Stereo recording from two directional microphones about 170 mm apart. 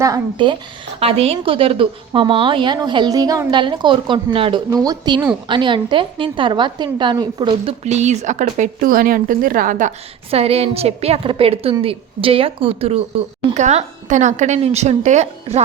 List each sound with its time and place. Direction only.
0.0 s a woman's voice: 25° right (ahead or behind)
0.9 s a woman's voice: 35° right (ahead or behind); by 9.9 s 50° right (ahead or behind)
10.3 s a woman's voice: 35° right (ahead or behind)